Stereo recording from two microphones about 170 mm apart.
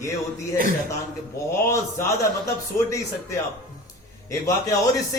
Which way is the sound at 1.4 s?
15° left (ahead or behind).